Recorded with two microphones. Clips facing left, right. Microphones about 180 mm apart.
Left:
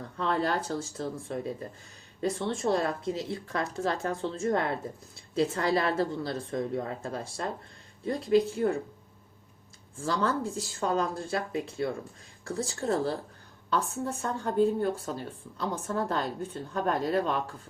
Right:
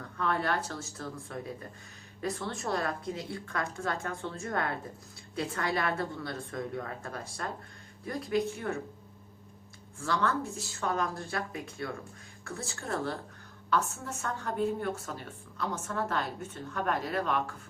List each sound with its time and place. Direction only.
0.2 s a woman's voice: 30° left (ahead or behind)
10.0 s a woman's voice: 30° left (ahead or behind)